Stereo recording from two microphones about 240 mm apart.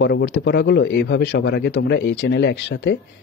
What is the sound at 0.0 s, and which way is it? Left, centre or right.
Speech, left.